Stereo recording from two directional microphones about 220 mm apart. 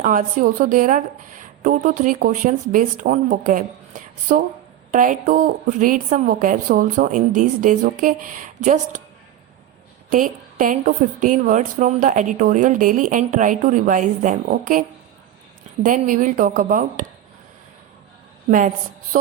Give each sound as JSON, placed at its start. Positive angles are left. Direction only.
{"t": 0.0, "sound": "a woman's voice", "side_deg": -35}
{"t": 10.1, "sound": "a woman's voice", "side_deg": -35}
{"t": 19.1, "sound": "a woman's voice", "side_deg": -35}